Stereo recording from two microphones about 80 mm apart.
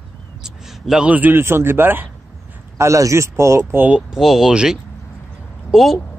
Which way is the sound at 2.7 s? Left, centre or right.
Right.